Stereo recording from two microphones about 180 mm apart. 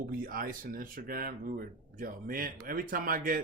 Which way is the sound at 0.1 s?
50° right (ahead or behind).